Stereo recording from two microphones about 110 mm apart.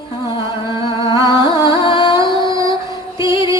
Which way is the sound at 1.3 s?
40° left (ahead or behind).